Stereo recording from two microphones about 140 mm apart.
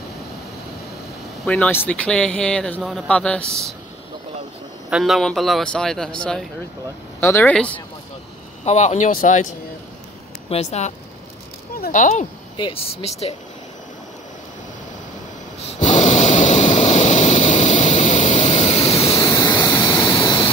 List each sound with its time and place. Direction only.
1.4 s speech: 10° left (ahead or behind)
4.8 s a man's voice: 5° right (ahead or behind)
7.2 s speech: 15° left (ahead or behind)
8.6 s speech: 55° left (ahead or behind)
10.5 s speech: 50° left (ahead or behind)
11.8 s speech: 70° left (ahead or behind)
12.5 s speech: 40° left (ahead or behind)
15.9 s a sound: 50° left (ahead or behind)
18.5 s vehicle: 45° left (ahead or behind)